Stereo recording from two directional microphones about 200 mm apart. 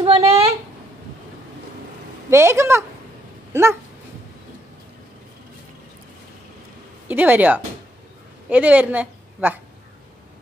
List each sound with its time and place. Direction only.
0.0 s a sound: 30° right (ahead or behind)
2.2 s speech: 15° right (ahead or behind)
7.1 s a woman's voice: 10° right (ahead or behind)